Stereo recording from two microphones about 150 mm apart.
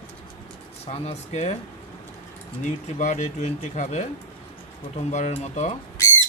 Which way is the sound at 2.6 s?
50° left (ahead or behind).